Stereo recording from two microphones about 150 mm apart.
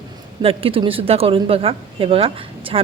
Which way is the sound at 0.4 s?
35° right (ahead or behind).